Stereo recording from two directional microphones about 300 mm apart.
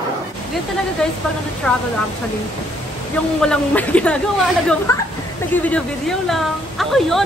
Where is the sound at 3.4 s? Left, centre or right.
Centre.